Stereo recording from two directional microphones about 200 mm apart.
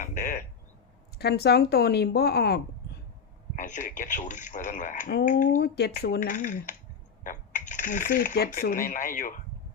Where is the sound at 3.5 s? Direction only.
40° left (ahead or behind).